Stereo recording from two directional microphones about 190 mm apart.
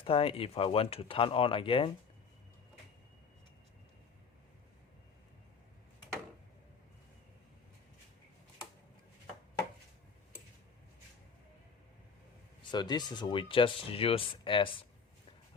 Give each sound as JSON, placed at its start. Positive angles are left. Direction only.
{"t": 0.0, "sound": "speech", "side_deg": 30}
{"t": 12.7, "sound": "speech", "side_deg": 20}